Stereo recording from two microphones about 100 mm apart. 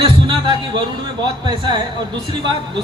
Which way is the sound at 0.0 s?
50° right (ahead or behind).